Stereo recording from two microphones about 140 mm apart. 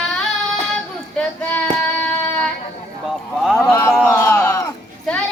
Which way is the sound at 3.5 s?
15° left (ahead or behind).